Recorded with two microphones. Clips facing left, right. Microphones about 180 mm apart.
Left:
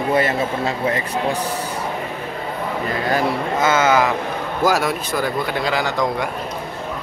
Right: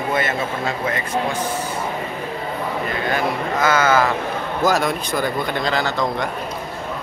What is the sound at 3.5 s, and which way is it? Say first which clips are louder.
Speech: even; 20° left (ahead or behind).